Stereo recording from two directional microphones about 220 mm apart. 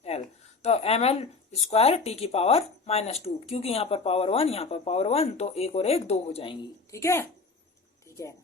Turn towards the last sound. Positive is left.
turn(degrees=10)  # may be behind; listen again after turning